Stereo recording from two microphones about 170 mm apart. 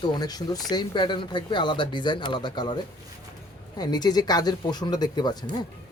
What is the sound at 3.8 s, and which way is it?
Speech, 25° left (ahead or behind).